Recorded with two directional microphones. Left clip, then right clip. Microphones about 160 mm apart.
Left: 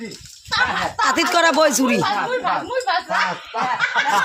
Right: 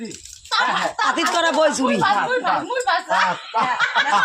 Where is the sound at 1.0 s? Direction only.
20° left (ahead or behind).